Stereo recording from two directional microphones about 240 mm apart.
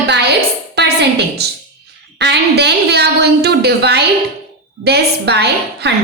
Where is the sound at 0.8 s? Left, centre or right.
Right.